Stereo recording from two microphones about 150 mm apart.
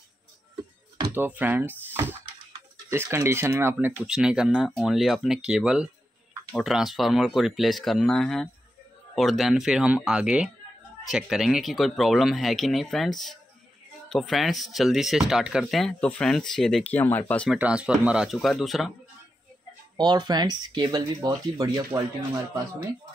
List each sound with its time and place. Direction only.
1.1 s speech: 10° right (ahead or behind); by 17.5 s 10° left (ahead or behind)
17.5 s speech: 5° right (ahead or behind)
20.0 s speech: 30° right (ahead or behind)